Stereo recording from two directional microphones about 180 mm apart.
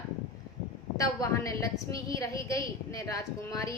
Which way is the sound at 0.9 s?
20° left (ahead or behind).